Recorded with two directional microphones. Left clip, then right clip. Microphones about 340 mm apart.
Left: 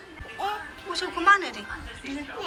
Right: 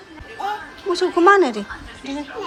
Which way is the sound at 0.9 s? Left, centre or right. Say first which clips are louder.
Right 7 dB; centre.